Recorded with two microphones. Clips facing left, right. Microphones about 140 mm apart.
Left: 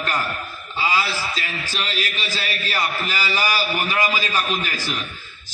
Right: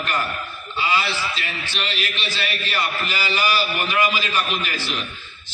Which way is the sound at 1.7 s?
40° left (ahead or behind).